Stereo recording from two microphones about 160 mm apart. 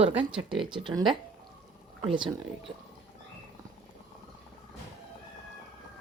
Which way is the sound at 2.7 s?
30° right (ahead or behind).